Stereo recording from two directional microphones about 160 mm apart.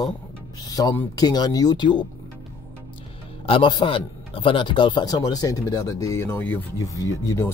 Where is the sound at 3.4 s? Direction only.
30° left (ahead or behind).